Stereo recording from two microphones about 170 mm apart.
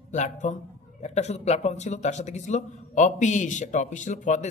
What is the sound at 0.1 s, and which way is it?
A man's voice, 45° left (ahead or behind).